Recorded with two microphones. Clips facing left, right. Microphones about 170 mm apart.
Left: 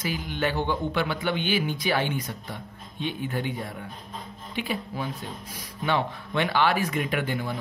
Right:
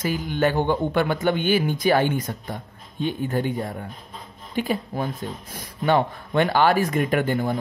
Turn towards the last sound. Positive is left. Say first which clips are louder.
# right 6 dB
turn(degrees=-45)  # may be behind; listen again after turning